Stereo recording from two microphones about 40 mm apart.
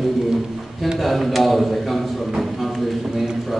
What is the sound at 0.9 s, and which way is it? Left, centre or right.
A man's voice, centre.